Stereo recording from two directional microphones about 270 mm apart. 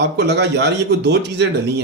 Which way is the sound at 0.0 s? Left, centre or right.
Right.